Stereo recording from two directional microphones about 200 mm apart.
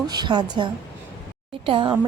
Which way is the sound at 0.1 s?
20° right (ahead or behind).